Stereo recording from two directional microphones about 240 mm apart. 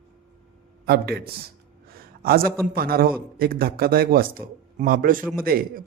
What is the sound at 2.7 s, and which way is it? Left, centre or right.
Speech, right.